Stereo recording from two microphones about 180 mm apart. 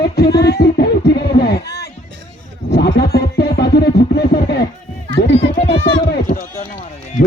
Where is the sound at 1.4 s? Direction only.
60° left (ahead or behind).